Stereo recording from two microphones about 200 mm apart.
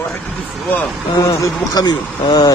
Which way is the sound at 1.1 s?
15° left (ahead or behind).